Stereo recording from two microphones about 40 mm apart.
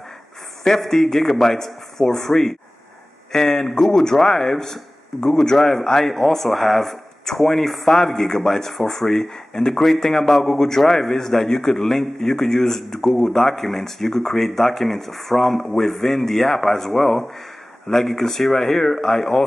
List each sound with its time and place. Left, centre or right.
0.7 s speech: centre
18.9 s speech: left